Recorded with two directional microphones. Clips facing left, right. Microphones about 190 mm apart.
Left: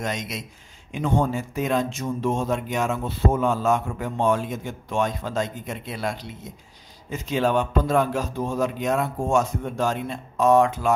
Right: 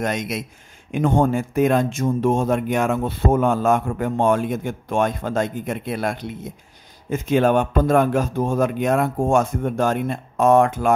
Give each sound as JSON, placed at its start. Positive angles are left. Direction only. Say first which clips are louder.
{"t": 0.0, "sound": "speech", "louder": "right 5 dB", "side_deg": -55}